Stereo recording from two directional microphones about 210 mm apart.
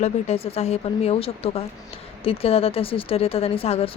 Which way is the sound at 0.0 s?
30° left (ahead or behind).